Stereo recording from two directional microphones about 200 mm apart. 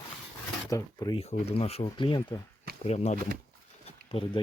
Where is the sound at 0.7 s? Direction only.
20° left (ahead or behind).